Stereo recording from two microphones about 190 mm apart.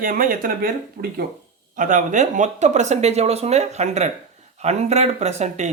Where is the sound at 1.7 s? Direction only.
40° right (ahead or behind).